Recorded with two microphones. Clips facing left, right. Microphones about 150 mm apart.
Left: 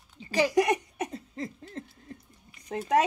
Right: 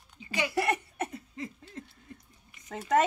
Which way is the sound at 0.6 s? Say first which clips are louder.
Left 5 dB; 15° left (ahead or behind).